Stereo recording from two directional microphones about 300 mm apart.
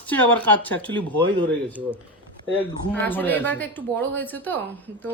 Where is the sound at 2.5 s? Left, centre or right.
Right.